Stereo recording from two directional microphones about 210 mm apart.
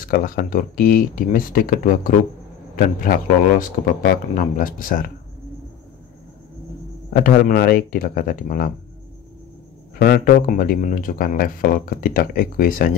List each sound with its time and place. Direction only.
0.0 s a man's voice: 45° left (ahead or behind)
7.2 s speech: 45° left (ahead or behind)
9.9 s speech: 50° left (ahead or behind)